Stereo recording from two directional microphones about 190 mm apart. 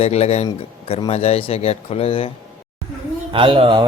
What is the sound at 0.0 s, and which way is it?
Speech, 35° left (ahead or behind).